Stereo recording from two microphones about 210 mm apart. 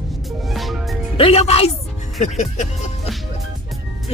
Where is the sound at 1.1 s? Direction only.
30° left (ahead or behind).